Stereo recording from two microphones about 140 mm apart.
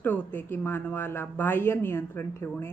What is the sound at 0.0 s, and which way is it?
A woman's voice, 15° left (ahead or behind).